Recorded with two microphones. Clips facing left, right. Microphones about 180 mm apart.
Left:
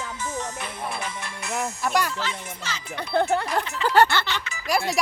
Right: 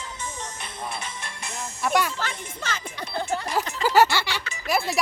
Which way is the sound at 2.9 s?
60° left (ahead or behind).